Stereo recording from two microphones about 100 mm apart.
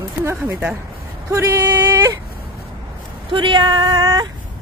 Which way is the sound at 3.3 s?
55° right (ahead or behind).